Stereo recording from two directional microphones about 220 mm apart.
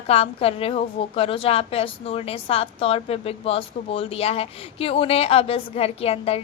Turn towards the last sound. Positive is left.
turn(degrees=25)  # may be behind; listen again after turning